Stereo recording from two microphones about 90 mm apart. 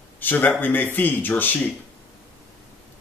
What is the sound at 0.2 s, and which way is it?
Speech, 20° left (ahead or behind).